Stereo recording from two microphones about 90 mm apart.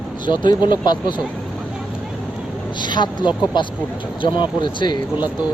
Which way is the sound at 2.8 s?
55° left (ahead or behind).